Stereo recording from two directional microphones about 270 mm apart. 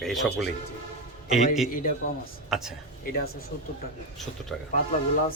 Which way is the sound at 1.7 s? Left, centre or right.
Left.